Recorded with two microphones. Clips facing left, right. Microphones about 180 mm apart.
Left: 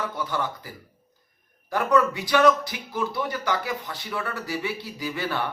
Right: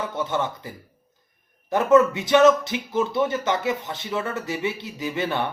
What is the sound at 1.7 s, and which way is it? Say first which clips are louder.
Speech: right 5 dB; 25° right (ahead or behind).